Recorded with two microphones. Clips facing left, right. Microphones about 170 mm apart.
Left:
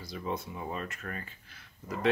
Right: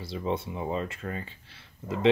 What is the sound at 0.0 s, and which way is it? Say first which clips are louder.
Speech: right 5 dB; 25° right (ahead or behind).